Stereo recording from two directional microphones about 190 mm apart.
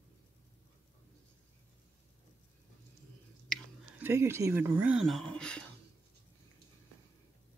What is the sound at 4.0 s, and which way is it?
Speech, 15° right (ahead or behind).